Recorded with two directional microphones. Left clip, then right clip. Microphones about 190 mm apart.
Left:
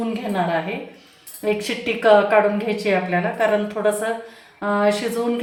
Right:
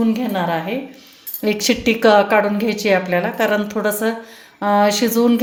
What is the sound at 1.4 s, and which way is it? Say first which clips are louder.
A woman's voice: right 5 dB; 50° right (ahead or behind).